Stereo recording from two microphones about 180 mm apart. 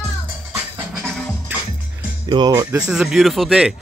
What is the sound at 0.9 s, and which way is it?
Music, centre (ahead or behind).